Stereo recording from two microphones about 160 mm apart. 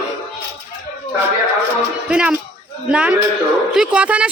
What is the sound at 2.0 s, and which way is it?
A man's voice, 5° right (ahead or behind).